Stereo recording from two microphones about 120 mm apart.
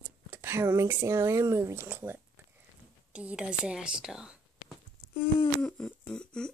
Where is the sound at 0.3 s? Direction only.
20° right (ahead or behind); by 4.4 s 5° right (ahead or behind).